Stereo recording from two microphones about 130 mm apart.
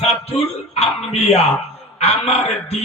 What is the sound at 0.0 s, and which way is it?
Speech, 55° left (ahead or behind).